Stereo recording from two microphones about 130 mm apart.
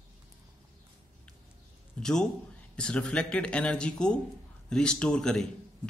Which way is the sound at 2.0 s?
5° left (ahead or behind).